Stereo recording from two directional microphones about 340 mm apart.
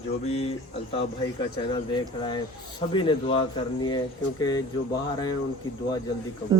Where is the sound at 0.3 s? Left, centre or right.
Centre.